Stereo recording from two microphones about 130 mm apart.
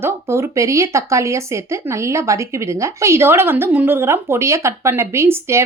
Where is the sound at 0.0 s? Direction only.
20° right (ahead or behind).